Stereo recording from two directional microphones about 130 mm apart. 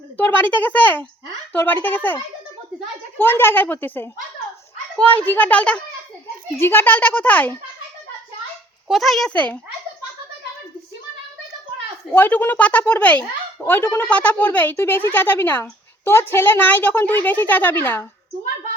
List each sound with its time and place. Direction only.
0.2 s speech: 15° left (ahead or behind)
8.9 s speech: centre (ahead or behind)
12.1 s speech: 15° left (ahead or behind)